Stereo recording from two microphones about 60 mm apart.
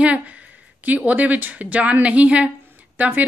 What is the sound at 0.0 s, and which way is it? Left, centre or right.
A woman's voice, right.